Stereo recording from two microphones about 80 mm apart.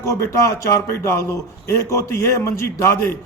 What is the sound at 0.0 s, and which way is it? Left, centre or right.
A man's voice, left.